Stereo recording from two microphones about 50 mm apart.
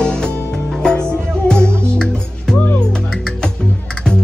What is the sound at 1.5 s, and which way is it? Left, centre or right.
Music, centre.